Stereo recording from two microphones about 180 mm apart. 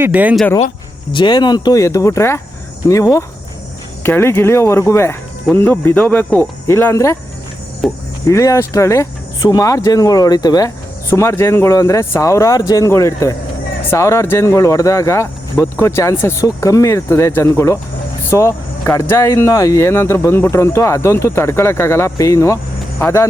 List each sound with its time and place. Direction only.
0.0 s speech: 10° right (ahead or behind)
1.1 s speech: 25° left (ahead or behind)
7.8 s cricket: centre (ahead or behind)
8.3 s speech: 15° left (ahead or behind)